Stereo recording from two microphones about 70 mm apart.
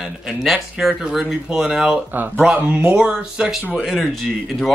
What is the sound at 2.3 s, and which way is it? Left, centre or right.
A man's voice, centre.